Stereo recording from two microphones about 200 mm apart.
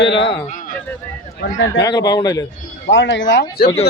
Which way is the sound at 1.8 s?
20° left (ahead or behind).